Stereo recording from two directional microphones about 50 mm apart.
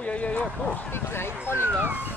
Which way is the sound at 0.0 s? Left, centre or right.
Left.